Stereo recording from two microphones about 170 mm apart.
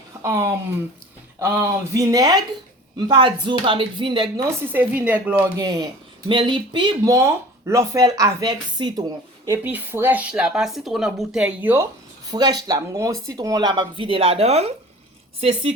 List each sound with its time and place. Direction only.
0.2 s speech: 15° right (ahead or behind)
4.7 s speech: 10° right (ahead or behind)
5.5 s speech: 25° right (ahead or behind)
9.6 s speech: 10° right (ahead or behind)
12.3 s a woman's voice: 20° right (ahead or behind)